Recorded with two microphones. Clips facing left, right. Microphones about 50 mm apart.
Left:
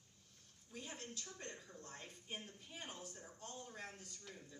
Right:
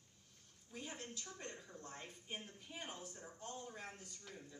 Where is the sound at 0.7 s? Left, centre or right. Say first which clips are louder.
Right 1 dB; right.